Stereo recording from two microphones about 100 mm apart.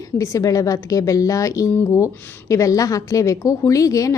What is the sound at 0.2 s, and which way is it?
A woman's voice, 35° left (ahead or behind).